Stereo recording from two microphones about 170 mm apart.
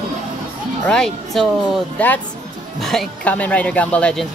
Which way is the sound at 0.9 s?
5° left (ahead or behind).